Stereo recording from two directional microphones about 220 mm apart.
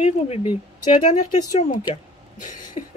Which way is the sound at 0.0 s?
25° left (ahead or behind).